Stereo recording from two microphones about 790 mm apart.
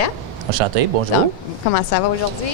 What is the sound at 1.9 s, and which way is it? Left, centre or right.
Speech, left.